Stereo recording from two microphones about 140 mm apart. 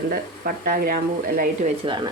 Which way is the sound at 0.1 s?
90° right.